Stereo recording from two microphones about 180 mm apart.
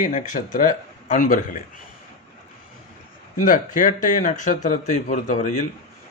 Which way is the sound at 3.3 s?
45° left (ahead or behind).